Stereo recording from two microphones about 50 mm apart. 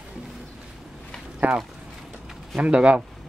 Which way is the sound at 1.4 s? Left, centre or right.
Right.